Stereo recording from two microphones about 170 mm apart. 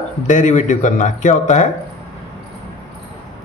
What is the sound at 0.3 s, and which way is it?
A man's voice, 45° left (ahead or behind).